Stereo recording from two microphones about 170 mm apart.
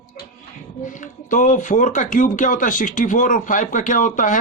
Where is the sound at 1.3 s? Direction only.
50° left (ahead or behind).